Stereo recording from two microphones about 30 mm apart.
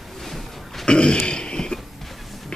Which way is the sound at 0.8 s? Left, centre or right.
Left.